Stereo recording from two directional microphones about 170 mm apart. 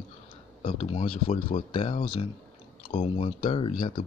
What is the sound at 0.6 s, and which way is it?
Speech, 40° left (ahead or behind).